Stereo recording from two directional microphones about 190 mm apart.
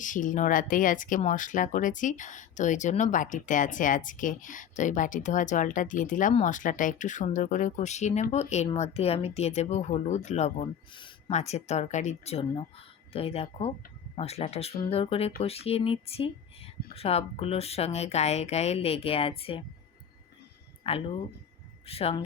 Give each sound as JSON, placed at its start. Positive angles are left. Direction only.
{"t": 0.0, "sound": "speech", "side_deg": 45}
{"t": 20.8, "sound": "speech", "side_deg": 30}